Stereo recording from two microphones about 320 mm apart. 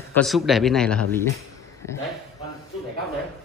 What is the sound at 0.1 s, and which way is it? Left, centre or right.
A man's voice, centre.